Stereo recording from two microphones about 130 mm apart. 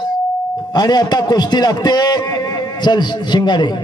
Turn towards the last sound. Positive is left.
turn(degrees=35)  # may be behind; listen again after turning